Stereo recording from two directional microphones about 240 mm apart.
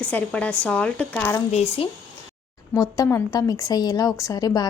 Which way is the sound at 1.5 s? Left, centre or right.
Left.